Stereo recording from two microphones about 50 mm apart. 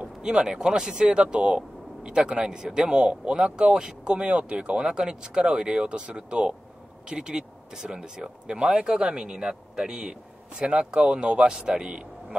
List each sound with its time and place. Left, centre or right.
0.0 s speech: centre